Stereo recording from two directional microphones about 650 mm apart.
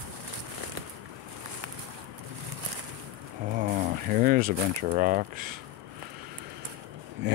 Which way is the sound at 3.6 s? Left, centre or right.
Centre.